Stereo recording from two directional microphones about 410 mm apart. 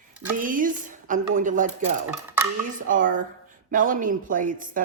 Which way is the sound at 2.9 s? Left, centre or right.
Centre.